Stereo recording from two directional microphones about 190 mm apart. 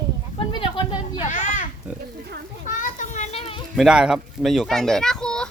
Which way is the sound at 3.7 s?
5° right (ahead or behind).